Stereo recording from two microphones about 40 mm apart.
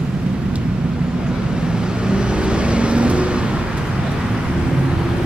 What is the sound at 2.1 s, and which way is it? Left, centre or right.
Vehicle, right.